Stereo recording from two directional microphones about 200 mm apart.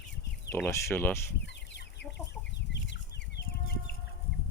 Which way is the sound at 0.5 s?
15° left (ahead or behind).